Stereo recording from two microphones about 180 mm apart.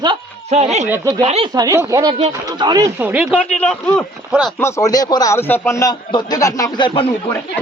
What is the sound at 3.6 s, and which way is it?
A man's voice, 5° left (ahead or behind).